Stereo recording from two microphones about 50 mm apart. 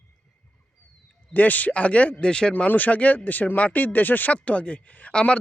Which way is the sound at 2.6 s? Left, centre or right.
Left.